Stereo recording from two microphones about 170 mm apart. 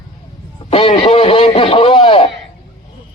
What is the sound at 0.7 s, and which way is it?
Radio, 35° left (ahead or behind).